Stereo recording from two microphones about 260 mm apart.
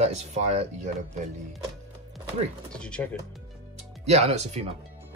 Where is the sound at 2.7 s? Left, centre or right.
Centre.